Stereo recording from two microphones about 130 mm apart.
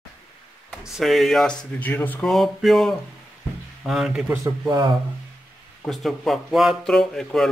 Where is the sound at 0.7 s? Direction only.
Centre (ahead or behind).